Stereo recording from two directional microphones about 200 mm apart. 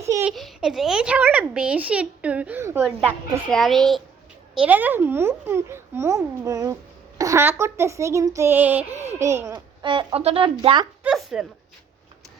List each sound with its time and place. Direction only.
0.0 s a sound: 10° right (ahead or behind)
0.3 s a child's voice: centre (ahead or behind)
9.8 s speech: 25° right (ahead or behind)
11.0 s a child's voice: centre (ahead or behind)